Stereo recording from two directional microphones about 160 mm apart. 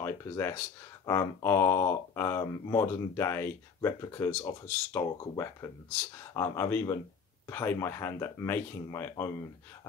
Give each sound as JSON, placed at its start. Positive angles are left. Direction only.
{"t": 0.0, "sound": "speech", "side_deg": 15}